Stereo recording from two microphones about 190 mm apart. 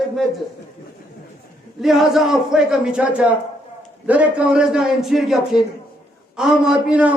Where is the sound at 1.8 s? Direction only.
Centre (ahead or behind).